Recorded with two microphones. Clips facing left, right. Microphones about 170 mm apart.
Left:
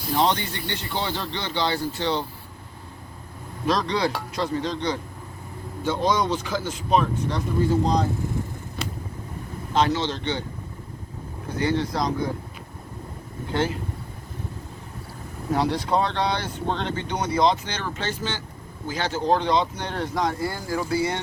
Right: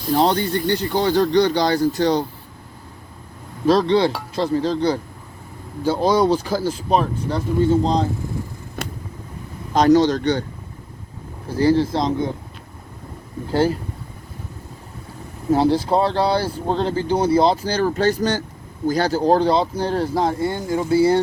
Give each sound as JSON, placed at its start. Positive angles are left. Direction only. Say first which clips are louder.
{"t": 0.1, "sound": "speech", "louder": "right 5 dB", "side_deg": -35}
{"t": 3.7, "sound": "speech", "louder": "right 8 dB", "side_deg": -30}
{"t": 8.8, "sound": "vehicle", "louder": "right 3 dB", "side_deg": -50}
{"t": 9.7, "sound": "speech", "louder": "right 9 dB", "side_deg": -40}
{"t": 11.4, "sound": "speech", "louder": "right 8 dB", "side_deg": -35}
{"t": 13.5, "sound": "speech", "louder": "right 7 dB", "side_deg": -35}
{"t": 15.5, "sound": "speech", "louder": "right 6 dB", "side_deg": -30}